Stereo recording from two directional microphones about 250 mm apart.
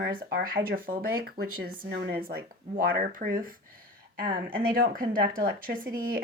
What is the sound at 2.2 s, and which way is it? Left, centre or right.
Speech, right.